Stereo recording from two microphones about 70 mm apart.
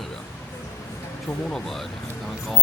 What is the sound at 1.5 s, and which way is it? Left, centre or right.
Speech, centre.